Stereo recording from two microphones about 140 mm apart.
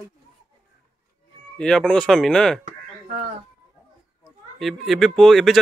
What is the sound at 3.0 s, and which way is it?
Speech, 80° right.